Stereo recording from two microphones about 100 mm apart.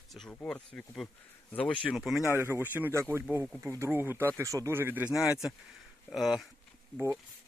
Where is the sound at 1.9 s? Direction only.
5° right (ahead or behind).